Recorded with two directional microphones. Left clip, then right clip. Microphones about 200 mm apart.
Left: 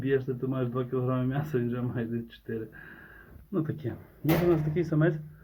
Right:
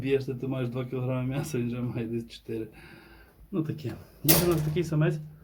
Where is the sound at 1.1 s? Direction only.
25° left (ahead or behind).